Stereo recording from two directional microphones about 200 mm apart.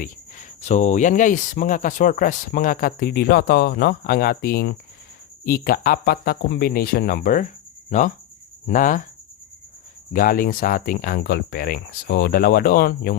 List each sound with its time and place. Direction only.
0.0 s speech: 35° left (ahead or behind)
10.1 s speech: 45° left (ahead or behind)